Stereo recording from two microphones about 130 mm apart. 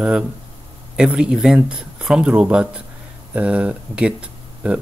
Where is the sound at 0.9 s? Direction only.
5° right (ahead or behind).